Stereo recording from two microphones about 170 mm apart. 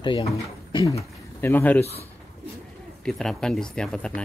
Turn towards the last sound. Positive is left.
turn(degrees=5)  # may be behind; listen again after turning